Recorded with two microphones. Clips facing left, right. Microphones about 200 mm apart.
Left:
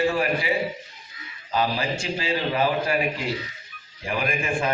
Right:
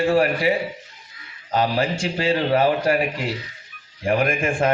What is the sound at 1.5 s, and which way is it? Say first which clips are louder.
A man's voice: right 4 dB; 50° right (ahead or behind).